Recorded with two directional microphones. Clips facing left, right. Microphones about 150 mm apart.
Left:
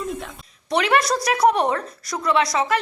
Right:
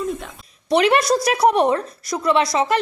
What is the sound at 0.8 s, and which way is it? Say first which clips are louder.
A woman's voice: right 3 dB; 25° right (ahead or behind).